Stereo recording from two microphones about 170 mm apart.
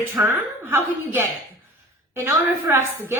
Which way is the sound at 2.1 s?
15° right (ahead or behind).